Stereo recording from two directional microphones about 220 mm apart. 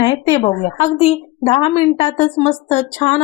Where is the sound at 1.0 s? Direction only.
25° left (ahead or behind).